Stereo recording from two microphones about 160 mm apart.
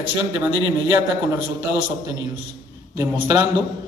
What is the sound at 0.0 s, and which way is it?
A man's voice, 25° right (ahead or behind).